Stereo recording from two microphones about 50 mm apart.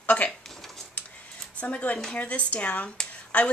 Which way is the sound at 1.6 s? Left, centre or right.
Left.